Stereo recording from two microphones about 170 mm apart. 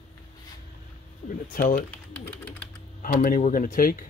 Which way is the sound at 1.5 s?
55° left (ahead or behind).